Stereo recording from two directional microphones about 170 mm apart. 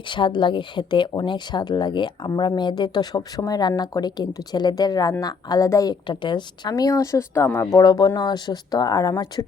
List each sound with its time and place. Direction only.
0.1 s speech: 25° left (ahead or behind)